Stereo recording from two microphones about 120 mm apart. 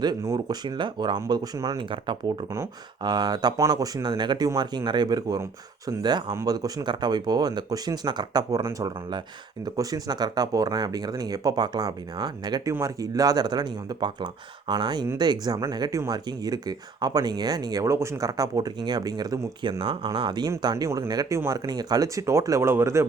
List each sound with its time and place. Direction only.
0.0 s speech: 30° right (ahead or behind)
1.8 s speech: 40° right (ahead or behind)
19.8 s speech: 45° right (ahead or behind); by 23.0 s 25° right (ahead or behind)